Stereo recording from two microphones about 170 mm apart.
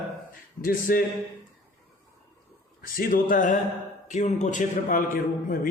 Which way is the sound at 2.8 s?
60° left (ahead or behind).